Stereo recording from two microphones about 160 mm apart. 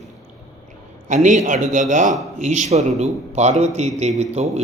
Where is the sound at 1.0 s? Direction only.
50° right (ahead or behind).